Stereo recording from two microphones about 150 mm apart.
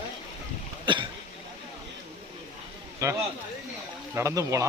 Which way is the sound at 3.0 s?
20° right (ahead or behind).